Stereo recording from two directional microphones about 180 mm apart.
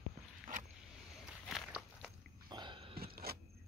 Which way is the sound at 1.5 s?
5° right (ahead or behind).